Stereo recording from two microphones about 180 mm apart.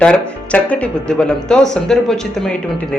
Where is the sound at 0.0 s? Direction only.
5° left (ahead or behind).